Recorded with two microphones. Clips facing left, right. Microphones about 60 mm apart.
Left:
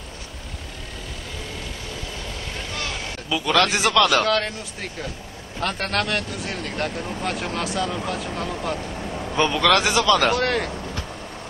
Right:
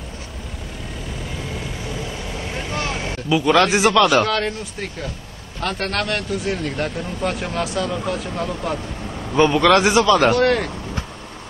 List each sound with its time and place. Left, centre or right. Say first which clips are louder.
2.2 s vehicle: right 4 dB; centre
4.1 s speech: right 2 dB; centre
5.6 s speech: right 1 dB; centre
9.4 s speech: right 5 dB; centre
10.3 s speech: right 5 dB; centre